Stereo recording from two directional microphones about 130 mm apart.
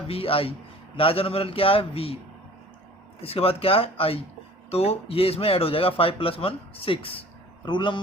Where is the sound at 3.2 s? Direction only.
50° left (ahead or behind).